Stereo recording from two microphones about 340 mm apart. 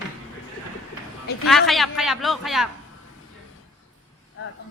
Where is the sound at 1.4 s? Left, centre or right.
Centre.